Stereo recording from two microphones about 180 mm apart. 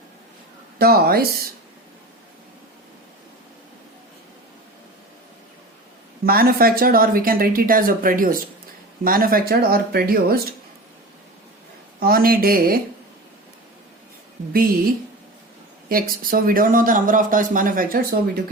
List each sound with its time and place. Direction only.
0.8 s speech: 60° right (ahead or behind)
6.2 s speech: 55° right (ahead or behind)
11.9 s speech: 55° right (ahead or behind)
14.5 s speech: 55° right (ahead or behind)
15.9 s speech: 55° right (ahead or behind)